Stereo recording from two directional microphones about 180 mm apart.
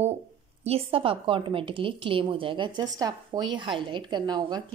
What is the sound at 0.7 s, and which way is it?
A woman's voice, 30° right (ahead or behind).